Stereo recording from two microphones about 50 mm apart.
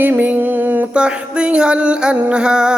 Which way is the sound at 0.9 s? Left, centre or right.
Right.